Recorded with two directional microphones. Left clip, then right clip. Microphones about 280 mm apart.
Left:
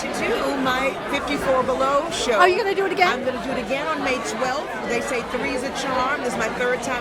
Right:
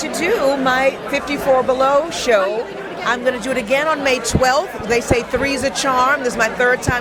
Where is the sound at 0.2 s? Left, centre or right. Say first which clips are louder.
Right 7 dB; right.